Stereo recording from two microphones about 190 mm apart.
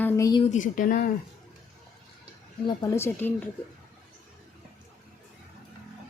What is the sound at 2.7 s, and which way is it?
Speech, 15° left (ahead or behind).